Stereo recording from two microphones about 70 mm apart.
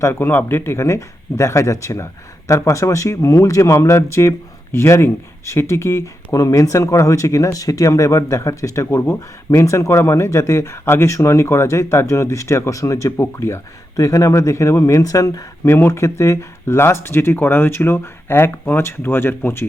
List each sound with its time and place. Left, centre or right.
0.0 s speech: left
13.9 s speech: left
15.9 s speech: left